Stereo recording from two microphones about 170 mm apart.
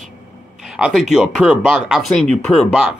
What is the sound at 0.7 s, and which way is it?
Speech, 5° right (ahead or behind).